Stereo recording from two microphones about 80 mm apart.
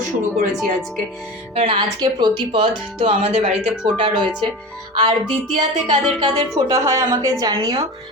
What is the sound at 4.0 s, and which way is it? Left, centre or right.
Speech, right.